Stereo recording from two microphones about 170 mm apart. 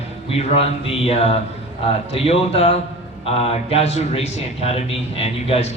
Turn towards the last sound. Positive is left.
turn(degrees=35)  # may be behind; listen again after turning